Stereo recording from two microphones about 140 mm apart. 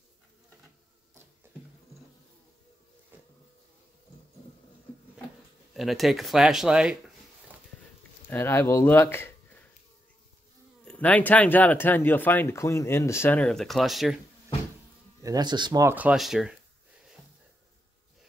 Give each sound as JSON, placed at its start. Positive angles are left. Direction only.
{"t": 5.8, "sound": "speech", "side_deg": 0}
{"t": 8.3, "sound": "speech", "side_deg": 15}
{"t": 10.9, "sound": "speech", "side_deg": 10}
{"t": 15.2, "sound": "speech", "side_deg": -30}
{"t": 15.8, "sound": "speech", "side_deg": -15}
{"t": 16.2, "sound": "speech", "side_deg": 0}